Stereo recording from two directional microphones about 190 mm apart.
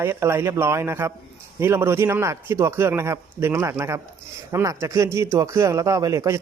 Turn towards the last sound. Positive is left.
turn(degrees=-15)  # may be behind; listen again after turning